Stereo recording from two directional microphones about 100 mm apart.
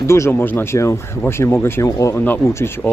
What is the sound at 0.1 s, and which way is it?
Speech, 25° left (ahead or behind).